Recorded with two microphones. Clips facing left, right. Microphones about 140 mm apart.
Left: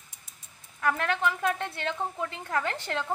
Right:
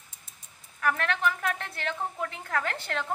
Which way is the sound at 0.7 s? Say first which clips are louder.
Left 1 dB; 20° left (ahead or behind).